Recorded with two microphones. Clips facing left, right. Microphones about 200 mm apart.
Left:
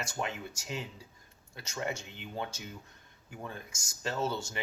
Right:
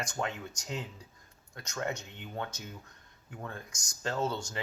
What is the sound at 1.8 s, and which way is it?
Speech, 10° left (ahead or behind).